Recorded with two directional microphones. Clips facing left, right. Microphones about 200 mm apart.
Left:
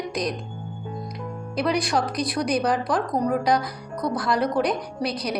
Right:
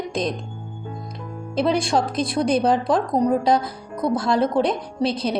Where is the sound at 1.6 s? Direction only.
25° right (ahead or behind).